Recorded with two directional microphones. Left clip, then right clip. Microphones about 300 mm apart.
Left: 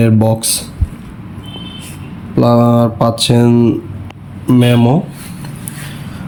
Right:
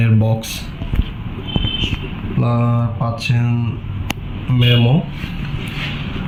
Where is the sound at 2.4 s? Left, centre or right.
Centre.